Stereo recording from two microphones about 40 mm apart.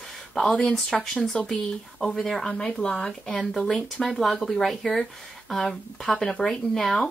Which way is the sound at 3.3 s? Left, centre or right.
Centre.